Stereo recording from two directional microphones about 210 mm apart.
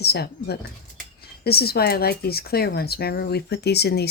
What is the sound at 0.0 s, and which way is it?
Speech, 50° left (ahead or behind).